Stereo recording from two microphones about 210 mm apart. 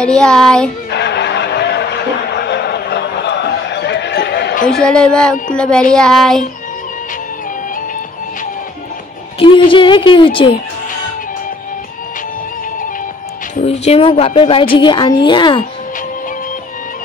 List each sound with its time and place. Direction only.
0.0 s child singing: 5° left (ahead or behind)
0.8 s a sound: 55° left (ahead or behind)
4.6 s child singing: 5° left (ahead or behind)
9.4 s a woman's voice: 25° left (ahead or behind)
13.6 s a woman's voice: 30° left (ahead or behind)